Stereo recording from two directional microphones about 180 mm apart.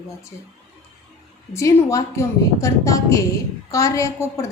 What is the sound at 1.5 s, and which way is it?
A woman's voice, 15° left (ahead or behind).